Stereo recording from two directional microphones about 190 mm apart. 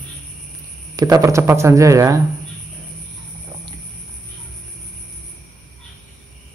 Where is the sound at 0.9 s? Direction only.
20° right (ahead or behind).